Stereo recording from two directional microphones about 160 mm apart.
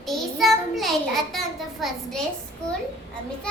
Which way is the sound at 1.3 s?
Centre (ahead or behind).